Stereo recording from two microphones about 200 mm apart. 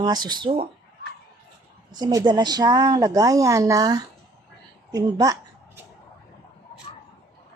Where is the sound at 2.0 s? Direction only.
20° right (ahead or behind).